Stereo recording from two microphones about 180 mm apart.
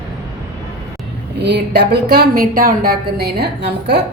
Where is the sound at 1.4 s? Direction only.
65° right (ahead or behind).